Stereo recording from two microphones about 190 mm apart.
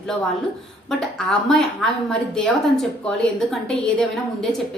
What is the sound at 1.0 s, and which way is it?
A woman's voice, centre (ahead or behind).